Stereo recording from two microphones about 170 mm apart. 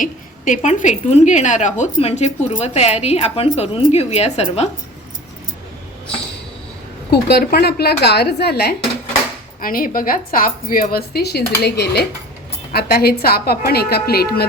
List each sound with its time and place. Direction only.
0.0 s a woman's voice: 45° left (ahead or behind)
7.1 s speech: 70° left (ahead or behind)
9.6 s speech: 55° left (ahead or behind)